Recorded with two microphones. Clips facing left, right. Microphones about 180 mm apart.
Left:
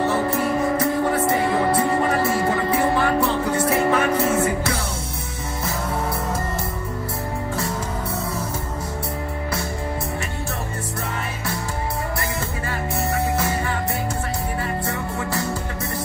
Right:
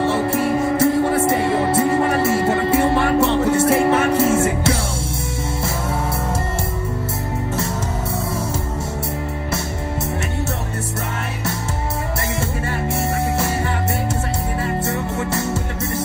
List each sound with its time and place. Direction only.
0.0 s music: 25° right (ahead or behind)
14.9 s music: 25° right (ahead or behind)